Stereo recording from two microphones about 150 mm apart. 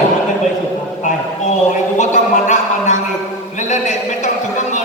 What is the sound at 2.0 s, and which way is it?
Speech, 55° left (ahead or behind).